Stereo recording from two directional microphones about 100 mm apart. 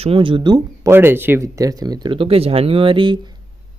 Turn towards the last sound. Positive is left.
turn(degrees=-60)  # may be behind; listen again after turning